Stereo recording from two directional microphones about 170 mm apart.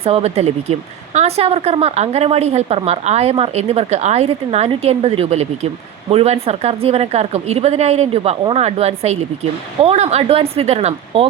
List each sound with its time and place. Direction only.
0.0 s a woman's voice: 35° right (ahead or behind)